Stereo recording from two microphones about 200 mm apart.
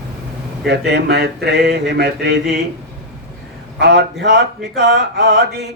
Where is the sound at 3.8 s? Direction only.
55° right (ahead or behind).